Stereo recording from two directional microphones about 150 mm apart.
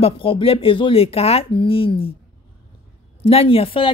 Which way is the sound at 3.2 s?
40° left (ahead or behind).